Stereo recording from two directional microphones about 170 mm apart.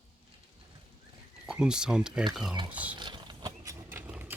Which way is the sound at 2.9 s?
25° right (ahead or behind).